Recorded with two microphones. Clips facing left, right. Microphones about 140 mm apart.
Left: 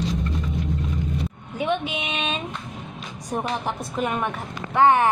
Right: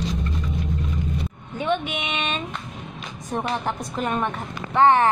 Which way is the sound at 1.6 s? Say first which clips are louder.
Even; 5° left (ahead or behind).